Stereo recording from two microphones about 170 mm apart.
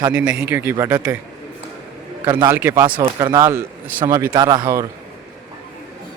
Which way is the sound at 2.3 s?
15° right (ahead or behind).